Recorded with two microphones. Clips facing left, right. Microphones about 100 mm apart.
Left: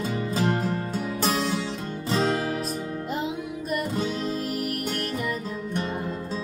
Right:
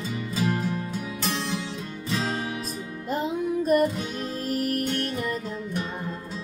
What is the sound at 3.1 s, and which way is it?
Music, 45° right (ahead or behind).